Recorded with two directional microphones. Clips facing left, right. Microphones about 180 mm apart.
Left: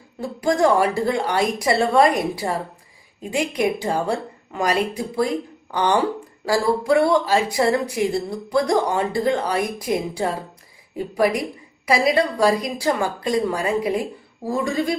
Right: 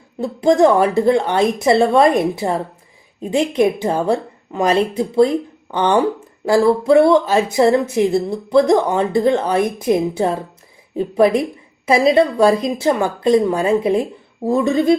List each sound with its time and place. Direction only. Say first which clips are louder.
0.2 s speech: right 6 dB; 20° right (ahead or behind)
11.9 s speech: right 5 dB; 25° right (ahead or behind)